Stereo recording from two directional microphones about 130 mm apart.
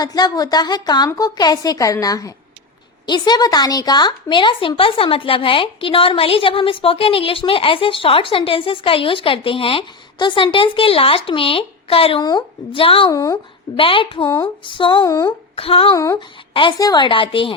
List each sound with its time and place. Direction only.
0.0 s a woman's voice: 30° left (ahead or behind); by 12.2 s 45° left (ahead or behind)
12.2 s a woman's voice: 30° left (ahead or behind)
12.8 s speech: 45° left (ahead or behind)
13.1 s a woman's voice: 25° left (ahead or behind)
13.7 s a woman's voice: 45° left (ahead or behind)
15.0 s a woman's voice: 25° left (ahead or behind)
15.3 s a sound: 45° left (ahead or behind)
16.6 s a woman's voice: 35° left (ahead or behind)